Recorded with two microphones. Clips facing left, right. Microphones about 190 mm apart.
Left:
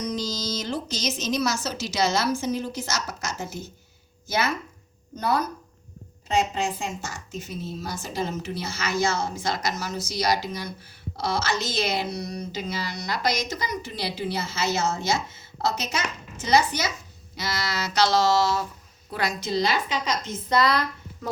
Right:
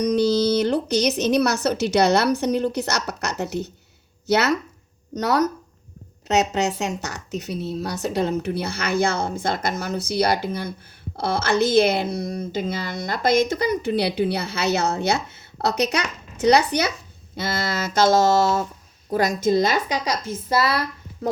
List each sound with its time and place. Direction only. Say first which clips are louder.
0.0 s speech: right 11 dB; 65° right (ahead or behind)
17.3 s a sound: right 4 dB; 50° right (ahead or behind)
20.1 s a woman's voice: right 2 dB; 10° right (ahead or behind)